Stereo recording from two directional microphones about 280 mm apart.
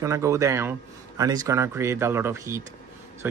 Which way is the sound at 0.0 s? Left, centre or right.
Centre.